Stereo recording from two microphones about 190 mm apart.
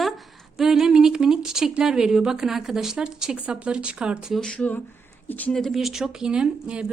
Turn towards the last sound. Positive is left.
turn(degrees=-5)  # may be behind; listen again after turning